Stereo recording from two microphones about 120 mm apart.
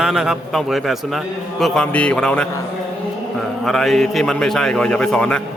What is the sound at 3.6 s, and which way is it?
A man's voice, centre (ahead or behind).